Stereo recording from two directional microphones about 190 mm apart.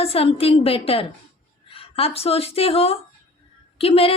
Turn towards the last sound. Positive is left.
turn(degrees=30)  # may be behind; listen again after turning